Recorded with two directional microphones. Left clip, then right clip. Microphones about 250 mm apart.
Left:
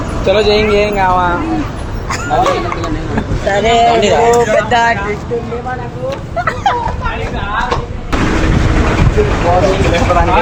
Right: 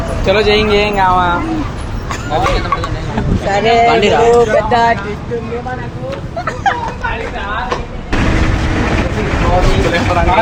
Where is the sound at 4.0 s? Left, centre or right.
Right.